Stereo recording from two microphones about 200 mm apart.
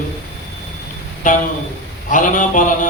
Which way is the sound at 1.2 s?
40° left (ahead or behind).